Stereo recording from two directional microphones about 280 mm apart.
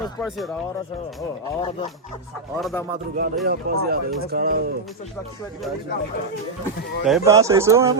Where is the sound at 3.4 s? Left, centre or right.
Right.